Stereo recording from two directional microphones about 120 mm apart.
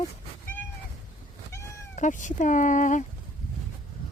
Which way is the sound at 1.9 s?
90° left.